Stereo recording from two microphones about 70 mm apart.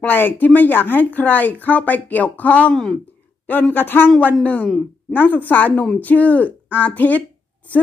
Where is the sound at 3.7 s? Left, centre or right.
Left.